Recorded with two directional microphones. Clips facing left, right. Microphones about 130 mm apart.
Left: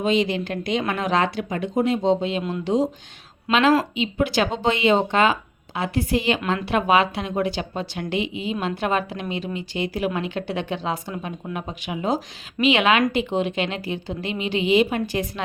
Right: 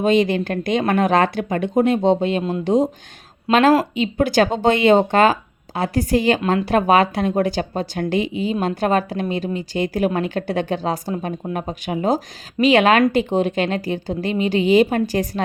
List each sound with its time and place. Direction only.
0.0 s speech: 50° right (ahead or behind)